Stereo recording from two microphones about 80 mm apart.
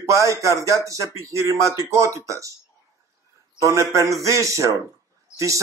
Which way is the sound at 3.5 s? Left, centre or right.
Right.